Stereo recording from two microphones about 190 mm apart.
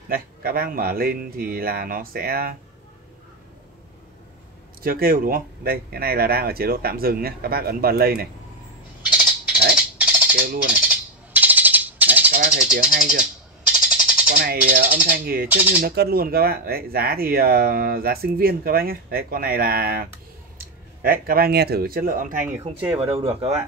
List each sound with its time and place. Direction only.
0.1 s speech: 50° right (ahead or behind)
4.8 s speech: 50° right (ahead or behind)
9.0 s a sound: 5° right (ahead or behind)
9.8 s music: 5° right (ahead or behind)
10.7 s a sound: 5° right (ahead or behind)
15.0 s speech: 50° right (ahead or behind)
15.4 s speech: 10° right (ahead or behind)
15.8 s speech: 55° right (ahead or behind)
22.4 s speech: 10° right (ahead or behind)
23.1 s speech: 30° right (ahead or behind)